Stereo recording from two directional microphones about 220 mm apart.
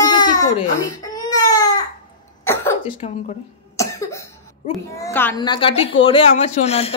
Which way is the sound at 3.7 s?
15° left (ahead or behind).